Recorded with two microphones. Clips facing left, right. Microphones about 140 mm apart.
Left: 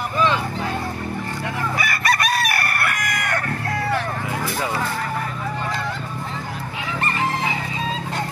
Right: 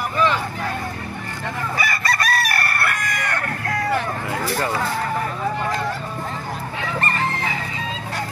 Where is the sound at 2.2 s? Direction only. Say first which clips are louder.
Even; 15° left (ahead or behind).